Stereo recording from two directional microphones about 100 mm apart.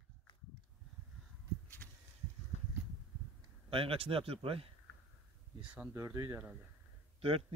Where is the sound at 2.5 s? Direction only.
90° left.